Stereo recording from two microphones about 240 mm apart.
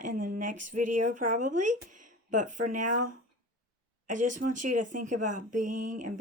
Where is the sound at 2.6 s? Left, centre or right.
Right.